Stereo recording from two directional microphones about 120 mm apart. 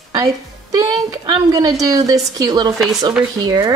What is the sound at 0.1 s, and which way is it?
A woman's voice, 35° right (ahead or behind).